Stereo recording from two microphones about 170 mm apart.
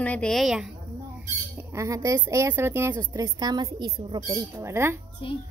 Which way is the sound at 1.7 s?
20° right (ahead or behind).